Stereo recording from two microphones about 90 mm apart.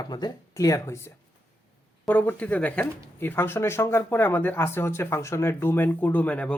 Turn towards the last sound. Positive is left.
turn(degrees=15)  # may be behind; listen again after turning